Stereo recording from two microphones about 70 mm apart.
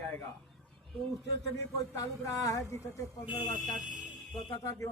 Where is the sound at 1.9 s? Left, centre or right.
Left.